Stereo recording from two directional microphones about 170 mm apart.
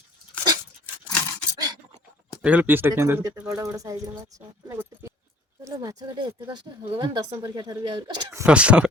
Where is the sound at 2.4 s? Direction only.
10° right (ahead or behind); by 8.1 s 30° right (ahead or behind).